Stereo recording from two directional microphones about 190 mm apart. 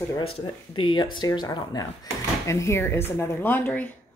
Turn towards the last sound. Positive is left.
turn(degrees=10)  # may be behind; listen again after turning